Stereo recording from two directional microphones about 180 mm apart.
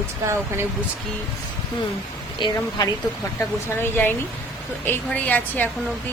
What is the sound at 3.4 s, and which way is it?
A woman's voice, 10° left (ahead or behind).